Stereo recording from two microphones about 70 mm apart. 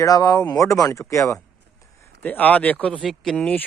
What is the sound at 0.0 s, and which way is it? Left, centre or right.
Speech, left.